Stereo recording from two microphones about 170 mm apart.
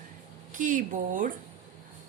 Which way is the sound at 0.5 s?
50° right (ahead or behind).